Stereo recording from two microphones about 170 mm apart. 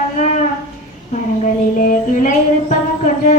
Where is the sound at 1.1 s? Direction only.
50° left (ahead or behind).